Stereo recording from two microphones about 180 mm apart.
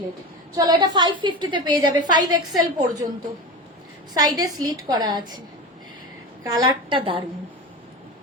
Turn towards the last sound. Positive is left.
turn(degrees=-30)  # may be behind; listen again after turning